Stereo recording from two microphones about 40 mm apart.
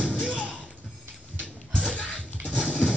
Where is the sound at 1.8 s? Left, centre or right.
Left.